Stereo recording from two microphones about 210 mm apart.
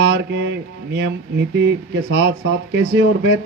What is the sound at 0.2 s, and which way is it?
Speech, 65° right (ahead or behind).